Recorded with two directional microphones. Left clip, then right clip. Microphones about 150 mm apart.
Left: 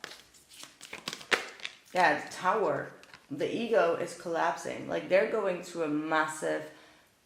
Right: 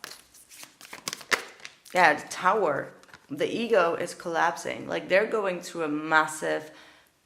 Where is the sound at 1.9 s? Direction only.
40° right (ahead or behind).